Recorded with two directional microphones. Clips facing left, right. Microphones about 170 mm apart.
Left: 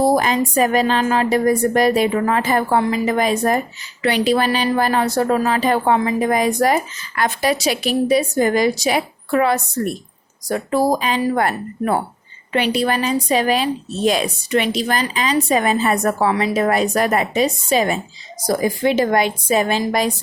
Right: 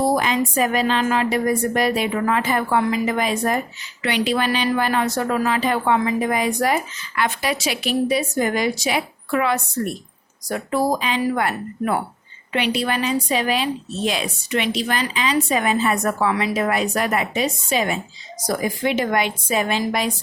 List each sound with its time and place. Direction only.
0.0 s speech: 40° left (ahead or behind)